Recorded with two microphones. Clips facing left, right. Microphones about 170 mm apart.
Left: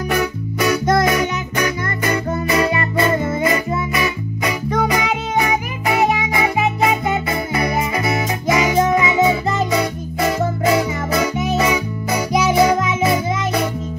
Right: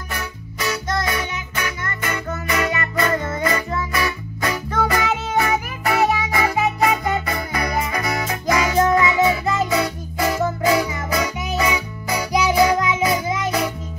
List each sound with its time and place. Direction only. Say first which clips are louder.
0.1 s music: left 10 dB; 75° left (ahead or behind)
1.2 s music: left 8 dB; 35° left (ahead or behind)